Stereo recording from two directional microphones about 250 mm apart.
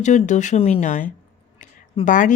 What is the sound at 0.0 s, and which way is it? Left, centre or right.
A woman's voice, left.